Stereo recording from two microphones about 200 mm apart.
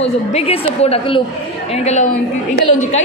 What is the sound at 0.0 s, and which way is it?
A woman's voice, 30° left (ahead or behind).